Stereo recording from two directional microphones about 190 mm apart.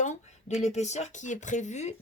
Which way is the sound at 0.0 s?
40° left (ahead or behind).